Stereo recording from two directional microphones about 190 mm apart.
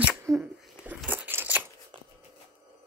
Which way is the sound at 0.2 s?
10° right (ahead or behind).